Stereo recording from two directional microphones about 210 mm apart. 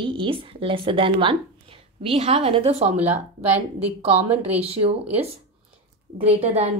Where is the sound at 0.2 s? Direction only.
25° right (ahead or behind).